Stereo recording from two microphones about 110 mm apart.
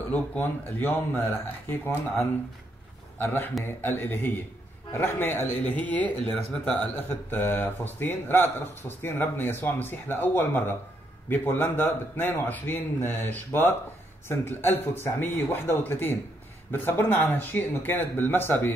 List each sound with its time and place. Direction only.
0.1 s speech: 15° left (ahead or behind)
3.2 s speech: 20° left (ahead or behind)